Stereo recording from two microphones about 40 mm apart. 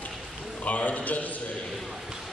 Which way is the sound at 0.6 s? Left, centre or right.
Left.